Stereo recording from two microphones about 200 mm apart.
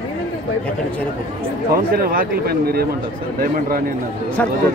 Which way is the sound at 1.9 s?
50° right (ahead or behind).